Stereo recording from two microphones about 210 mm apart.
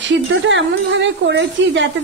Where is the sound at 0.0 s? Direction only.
60° right (ahead or behind).